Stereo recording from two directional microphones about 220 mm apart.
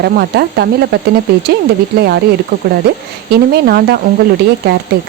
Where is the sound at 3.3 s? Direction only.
45° right (ahead or behind).